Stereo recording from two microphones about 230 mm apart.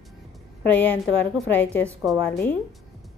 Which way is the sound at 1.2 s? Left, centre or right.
Centre.